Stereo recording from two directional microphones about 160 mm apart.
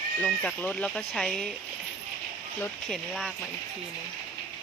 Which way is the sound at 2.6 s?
5° left (ahead or behind).